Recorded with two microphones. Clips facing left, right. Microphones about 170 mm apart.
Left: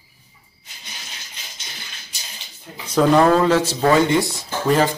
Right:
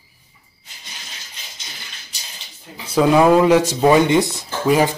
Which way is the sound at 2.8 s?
5° right (ahead or behind).